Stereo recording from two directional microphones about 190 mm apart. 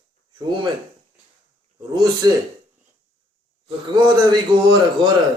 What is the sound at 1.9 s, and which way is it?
Speech, 20° right (ahead or behind).